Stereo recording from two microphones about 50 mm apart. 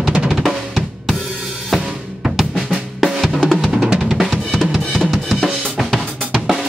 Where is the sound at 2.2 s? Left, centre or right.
Centre.